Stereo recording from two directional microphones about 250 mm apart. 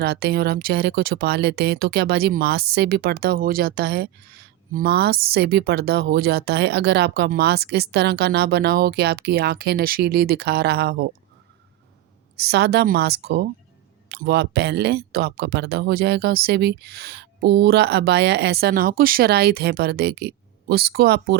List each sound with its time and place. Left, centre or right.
0.0 s speech: right
12.4 s speech: right